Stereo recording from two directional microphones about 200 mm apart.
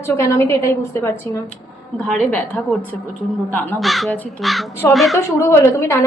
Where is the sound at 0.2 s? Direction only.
15° left (ahead or behind).